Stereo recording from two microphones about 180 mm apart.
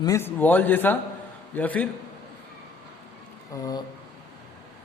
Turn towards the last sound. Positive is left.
turn(degrees=20)  # may be behind; listen again after turning